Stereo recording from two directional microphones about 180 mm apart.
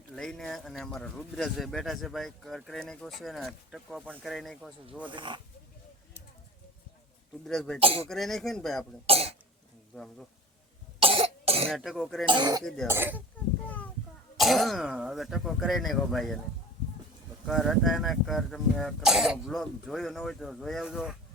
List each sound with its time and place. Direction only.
0.2 s speech: centre (ahead or behind)
5.1 s speech: 25° right (ahead or behind)
7.4 s speech: 5° left (ahead or behind)
7.8 s speech: 30° right (ahead or behind)
8.0 s speech: centre (ahead or behind)
9.0 s speech: 35° right (ahead or behind)
9.9 s speech: 5° left (ahead or behind)
11.0 s cough: 30° right (ahead or behind)
11.7 s speech: centre (ahead or behind)
12.2 s speech: 25° right (ahead or behind)
12.6 s speech: 5° left (ahead or behind)
12.9 s speech: 10° right (ahead or behind)
14.3 s speech: centre (ahead or behind)
17.4 s speech: centre (ahead or behind)